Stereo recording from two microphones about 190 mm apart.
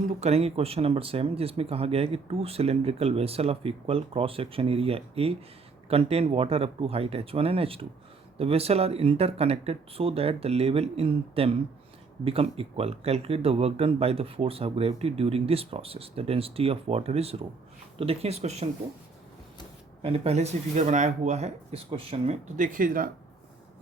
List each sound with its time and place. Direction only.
0.2 s speech: 35° right (ahead or behind)
20.0 s speech: 30° right (ahead or behind)